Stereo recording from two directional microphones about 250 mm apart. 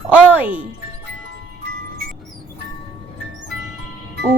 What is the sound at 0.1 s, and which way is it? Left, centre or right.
Music, centre.